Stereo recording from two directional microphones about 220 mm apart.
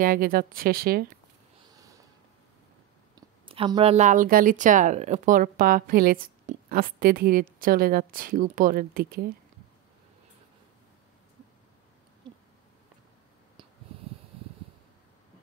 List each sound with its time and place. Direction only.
0.0 s a woman's voice: 40° right (ahead or behind)
1.7 s a sound: 15° right (ahead or behind)
3.2 s a woman's voice: 20° right (ahead or behind); by 9.3 s 40° right (ahead or behind)
12.2 s owl: 20° right (ahead or behind)